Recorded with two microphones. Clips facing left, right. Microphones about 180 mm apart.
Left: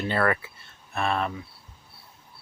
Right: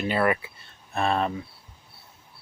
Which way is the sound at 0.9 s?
30° right (ahead or behind).